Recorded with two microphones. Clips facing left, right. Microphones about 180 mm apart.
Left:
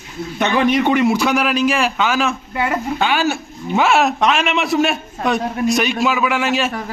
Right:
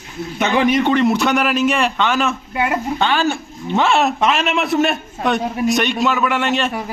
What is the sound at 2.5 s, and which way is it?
Speech, 15° right (ahead or behind).